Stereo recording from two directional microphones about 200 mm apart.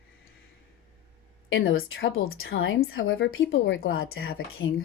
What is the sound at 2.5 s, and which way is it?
Speech, 80° left.